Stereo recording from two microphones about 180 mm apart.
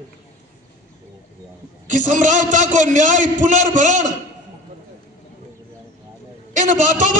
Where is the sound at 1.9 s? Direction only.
45° right (ahead or behind).